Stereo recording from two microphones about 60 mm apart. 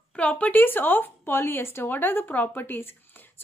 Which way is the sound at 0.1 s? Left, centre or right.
Left.